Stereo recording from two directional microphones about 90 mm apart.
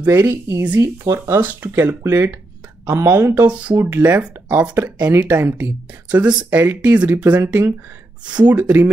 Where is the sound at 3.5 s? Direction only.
15° right (ahead or behind).